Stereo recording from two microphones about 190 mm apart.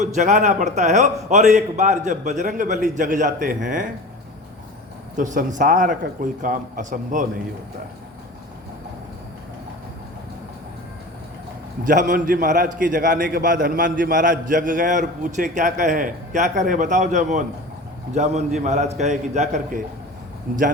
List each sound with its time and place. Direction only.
0.0 s a man's voice: 40° right (ahead or behind)
5.1 s a man's voice: 40° right (ahead or behind)
11.9 s a man's voice: 45° right (ahead or behind)